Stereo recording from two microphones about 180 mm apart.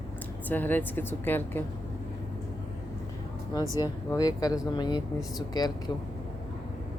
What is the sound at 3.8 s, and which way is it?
Speech, 20° left (ahead or behind).